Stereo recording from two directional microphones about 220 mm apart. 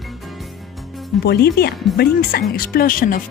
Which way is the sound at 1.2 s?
45° left (ahead or behind).